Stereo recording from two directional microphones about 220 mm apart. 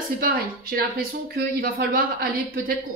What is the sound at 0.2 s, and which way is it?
Speech, 40° right (ahead or behind).